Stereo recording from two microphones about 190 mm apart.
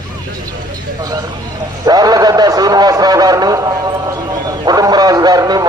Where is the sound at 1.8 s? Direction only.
20° right (ahead or behind).